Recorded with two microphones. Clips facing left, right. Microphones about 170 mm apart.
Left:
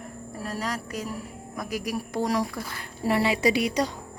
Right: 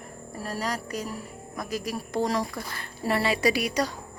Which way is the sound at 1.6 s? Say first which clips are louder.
Left 1 dB; 15° left (ahead or behind).